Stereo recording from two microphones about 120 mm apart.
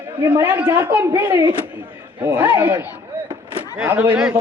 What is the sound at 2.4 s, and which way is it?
Speech, 15° right (ahead or behind).